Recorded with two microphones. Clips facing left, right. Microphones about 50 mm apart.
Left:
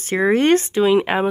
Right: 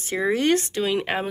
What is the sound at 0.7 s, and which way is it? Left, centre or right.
Speech, centre.